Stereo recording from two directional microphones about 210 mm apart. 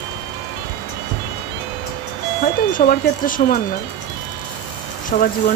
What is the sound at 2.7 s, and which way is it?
Speech, 40° left (ahead or behind).